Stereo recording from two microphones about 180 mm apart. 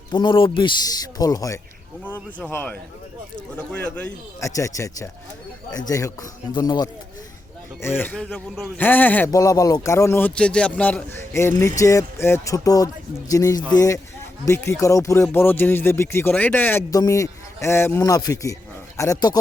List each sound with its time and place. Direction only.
0.1 s speech: 25° left (ahead or behind)
6.5 s speech: 25° left (ahead or behind)